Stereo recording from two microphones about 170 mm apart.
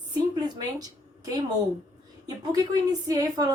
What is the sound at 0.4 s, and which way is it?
A woman's voice, 20° right (ahead or behind).